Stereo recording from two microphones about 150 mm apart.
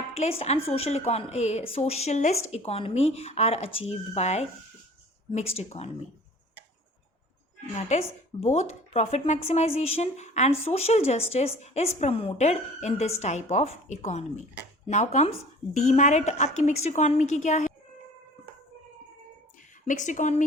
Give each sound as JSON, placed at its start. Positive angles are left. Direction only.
{"t": 0.1, "sound": "a woman's voice", "side_deg": 45}
{"t": 7.8, "sound": "a woman's voice", "side_deg": 45}
{"t": 19.8, "sound": "speech", "side_deg": 55}